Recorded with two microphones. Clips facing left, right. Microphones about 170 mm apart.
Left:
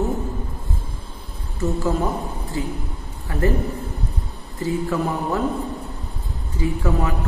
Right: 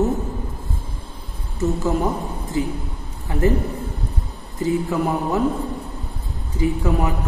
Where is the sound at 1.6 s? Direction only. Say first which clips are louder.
Right 1 dB; 20° right (ahead or behind).